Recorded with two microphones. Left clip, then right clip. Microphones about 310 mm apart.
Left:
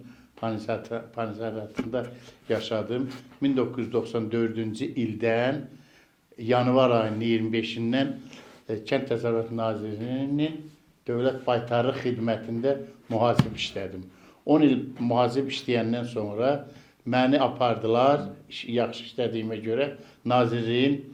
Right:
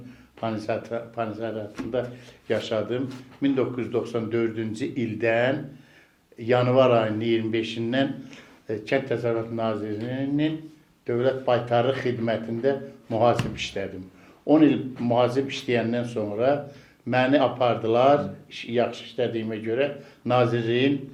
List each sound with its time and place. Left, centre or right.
0.3 s a man's voice: left